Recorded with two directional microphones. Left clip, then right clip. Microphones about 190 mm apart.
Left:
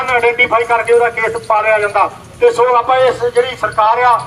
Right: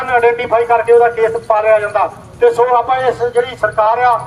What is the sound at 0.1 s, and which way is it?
A man's voice, 40° right (ahead or behind).